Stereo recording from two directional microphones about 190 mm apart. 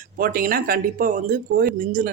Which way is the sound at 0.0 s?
50° right (ahead or behind).